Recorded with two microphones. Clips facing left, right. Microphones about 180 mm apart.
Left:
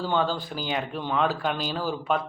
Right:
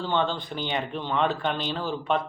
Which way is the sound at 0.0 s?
5° left (ahead or behind).